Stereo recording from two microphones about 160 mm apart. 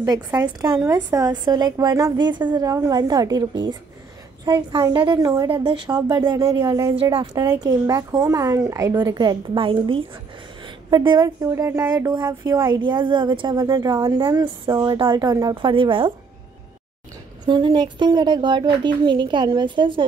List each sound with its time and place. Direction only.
0.4 s speech: 25° right (ahead or behind)
7.0 s speech: 35° right (ahead or behind)
7.4 s speech: 20° right (ahead or behind)
17.5 s speech: 30° right (ahead or behind)